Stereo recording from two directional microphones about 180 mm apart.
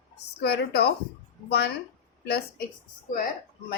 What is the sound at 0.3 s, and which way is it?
Speech, 65° left (ahead or behind).